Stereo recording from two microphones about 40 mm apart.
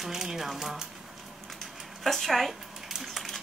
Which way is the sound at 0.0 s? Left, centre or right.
Centre.